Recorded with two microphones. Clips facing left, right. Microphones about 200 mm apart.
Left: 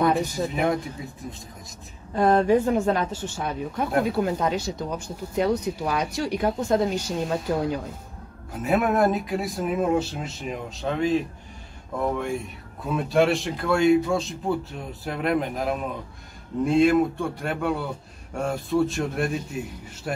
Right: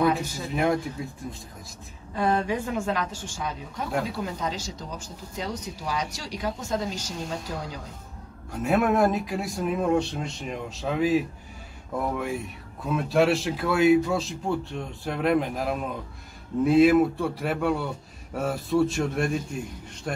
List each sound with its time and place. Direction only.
0.5 s speech: centre (ahead or behind)
2.1 s a woman's voice: 45° left (ahead or behind)
3.3 s speech: 55° left (ahead or behind)
8.5 s speech: centre (ahead or behind)
12.8 s speech: centre (ahead or behind)